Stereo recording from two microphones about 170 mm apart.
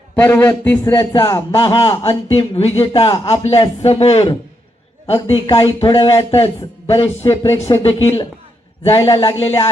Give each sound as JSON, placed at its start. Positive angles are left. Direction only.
{"t": 0.2, "sound": "speech", "side_deg": 15}
{"t": 0.9, "sound": "a man's voice", "side_deg": 25}